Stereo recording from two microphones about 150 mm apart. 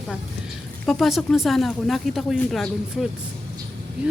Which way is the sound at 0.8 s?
Centre (ahead or behind).